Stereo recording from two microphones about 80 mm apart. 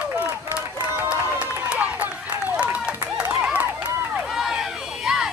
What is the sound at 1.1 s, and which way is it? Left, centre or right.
Run, centre.